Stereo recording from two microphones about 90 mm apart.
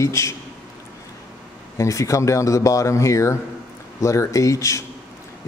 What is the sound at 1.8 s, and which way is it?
Speech, 35° left (ahead or behind).